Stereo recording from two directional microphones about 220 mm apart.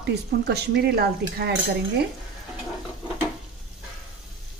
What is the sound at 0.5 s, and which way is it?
A woman's voice, 45° right (ahead or behind).